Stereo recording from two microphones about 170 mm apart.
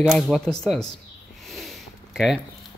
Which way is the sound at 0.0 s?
Centre (ahead or behind).